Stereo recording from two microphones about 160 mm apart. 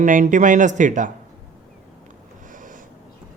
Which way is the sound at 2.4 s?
55° right (ahead or behind).